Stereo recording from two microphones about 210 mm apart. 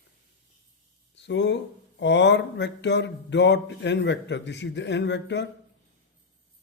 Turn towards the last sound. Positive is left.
turn(degrees=55)  # may be behind; listen again after turning